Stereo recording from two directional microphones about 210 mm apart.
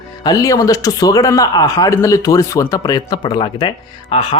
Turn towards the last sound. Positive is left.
turn(degrees=25)  # may be behind; listen again after turning